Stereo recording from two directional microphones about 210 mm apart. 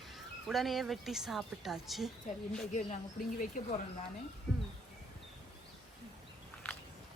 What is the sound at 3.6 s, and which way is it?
Speech, 40° left (ahead or behind).